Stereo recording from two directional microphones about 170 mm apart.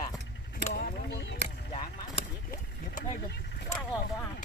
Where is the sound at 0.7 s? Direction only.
75° left (ahead or behind).